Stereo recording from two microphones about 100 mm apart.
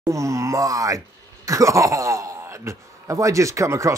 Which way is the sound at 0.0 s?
30° right (ahead or behind).